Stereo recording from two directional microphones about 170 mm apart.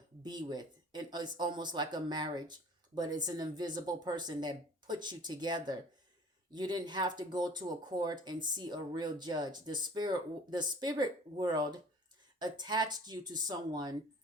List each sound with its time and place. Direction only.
0.2 s speech: 25° right (ahead or behind)